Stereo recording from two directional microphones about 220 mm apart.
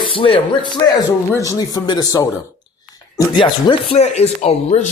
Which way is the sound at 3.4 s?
25° left (ahead or behind).